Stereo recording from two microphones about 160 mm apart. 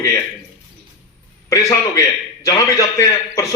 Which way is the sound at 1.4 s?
20° left (ahead or behind).